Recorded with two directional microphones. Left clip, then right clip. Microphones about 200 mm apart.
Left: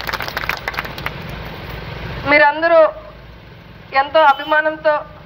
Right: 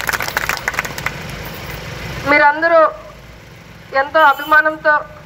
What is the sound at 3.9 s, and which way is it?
Speech, centre (ahead or behind).